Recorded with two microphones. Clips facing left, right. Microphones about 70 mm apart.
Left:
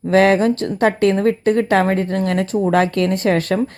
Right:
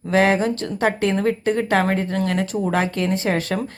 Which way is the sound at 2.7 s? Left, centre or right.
Left.